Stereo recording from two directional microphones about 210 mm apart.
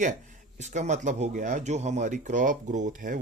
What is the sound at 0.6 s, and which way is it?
Speech, 35° right (ahead or behind).